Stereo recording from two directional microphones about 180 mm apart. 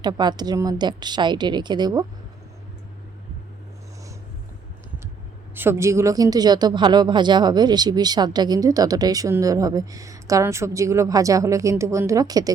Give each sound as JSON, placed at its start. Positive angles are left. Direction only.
{"t": 0.0, "sound": "speech", "side_deg": -25}
{"t": 5.5, "sound": "speech", "side_deg": -15}